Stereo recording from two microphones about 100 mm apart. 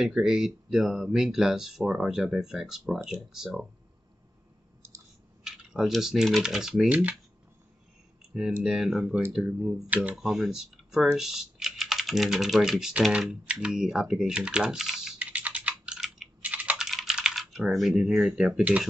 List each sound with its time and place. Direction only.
0.0 s speech: 5° right (ahead or behind)
5.4 s speech: 5° right (ahead or behind)
8.3 s speech: 5° right (ahead or behind)
15.3 s typing: 15° right (ahead or behind)
16.3 s computer keyboard: 15° right (ahead or behind)
16.8 s speech: 5° right (ahead or behind)